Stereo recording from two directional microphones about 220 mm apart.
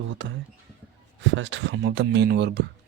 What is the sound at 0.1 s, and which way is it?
Speech, 60° right (ahead or behind).